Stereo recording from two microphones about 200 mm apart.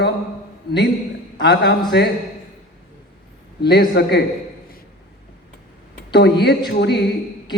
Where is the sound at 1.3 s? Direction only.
55° left (ahead or behind).